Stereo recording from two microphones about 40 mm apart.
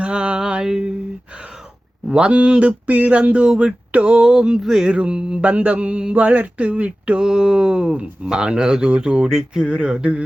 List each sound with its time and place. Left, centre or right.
0.0 s music: right
2.1 s speech: right
3.9 s a sound: right; by 4.9 s centre
4.9 s speech: right
5.5 s speech: right
7.2 s speech: centre
8.9 s speech: right